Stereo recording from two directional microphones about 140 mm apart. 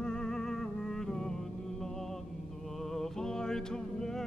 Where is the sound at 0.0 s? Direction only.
5° left (ahead or behind).